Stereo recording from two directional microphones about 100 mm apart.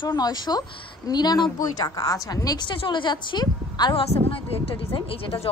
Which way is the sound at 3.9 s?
70° left (ahead or behind).